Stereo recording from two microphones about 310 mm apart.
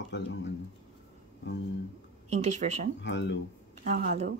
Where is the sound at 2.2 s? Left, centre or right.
Right.